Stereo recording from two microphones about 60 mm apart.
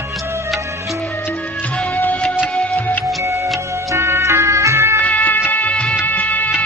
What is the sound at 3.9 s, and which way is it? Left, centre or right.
Ambulance, right.